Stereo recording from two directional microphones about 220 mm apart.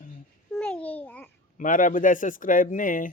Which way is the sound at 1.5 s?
35° left (ahead or behind).